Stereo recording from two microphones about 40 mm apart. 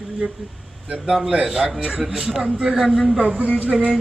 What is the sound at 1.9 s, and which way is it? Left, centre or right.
Speech, centre.